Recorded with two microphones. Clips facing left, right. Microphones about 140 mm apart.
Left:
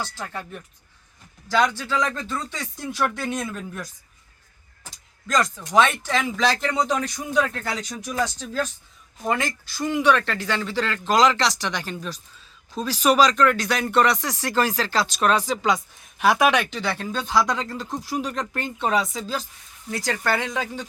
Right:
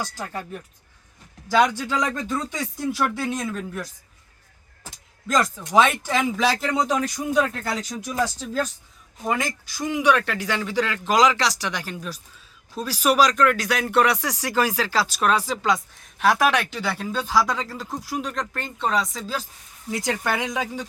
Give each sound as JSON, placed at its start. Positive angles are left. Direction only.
{"t": 0.2, "sound": "speech", "side_deg": -10}
{"t": 2.9, "sound": "speech", "side_deg": 0}
{"t": 5.3, "sound": "speech", "side_deg": -5}
{"t": 19.9, "sound": "speech", "side_deg": -20}